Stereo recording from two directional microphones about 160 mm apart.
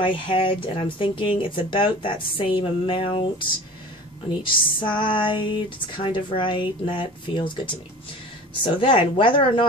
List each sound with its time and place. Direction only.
0.0 s speech: 30° left (ahead or behind)